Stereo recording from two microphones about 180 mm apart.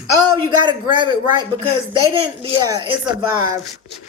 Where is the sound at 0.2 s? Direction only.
25° right (ahead or behind).